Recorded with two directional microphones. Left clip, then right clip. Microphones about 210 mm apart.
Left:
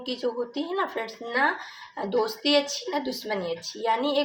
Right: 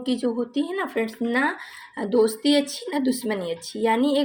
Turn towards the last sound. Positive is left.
turn(degrees=-40)  # may be behind; listen again after turning